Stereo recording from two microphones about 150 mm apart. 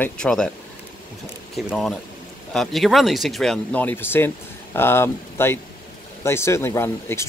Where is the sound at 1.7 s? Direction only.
Centre (ahead or behind).